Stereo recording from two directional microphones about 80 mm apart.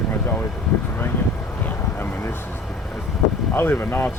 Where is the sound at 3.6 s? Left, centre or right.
Left.